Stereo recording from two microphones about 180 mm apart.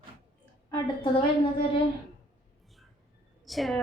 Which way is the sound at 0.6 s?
25° left (ahead or behind).